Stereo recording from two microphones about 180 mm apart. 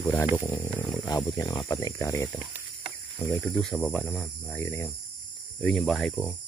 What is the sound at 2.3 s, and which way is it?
Snake, 5° right (ahead or behind).